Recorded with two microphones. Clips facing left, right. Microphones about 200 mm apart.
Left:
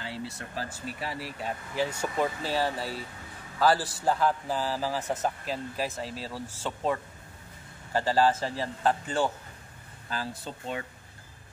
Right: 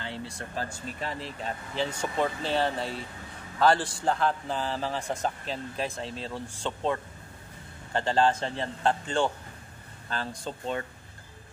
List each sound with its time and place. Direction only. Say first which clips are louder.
0.0 s a man's voice: even; 5° left (ahead or behind)
8.5 s a man's voice: even; 25° right (ahead or behind)
10.0 s speech: right 1 dB; 5° left (ahead or behind)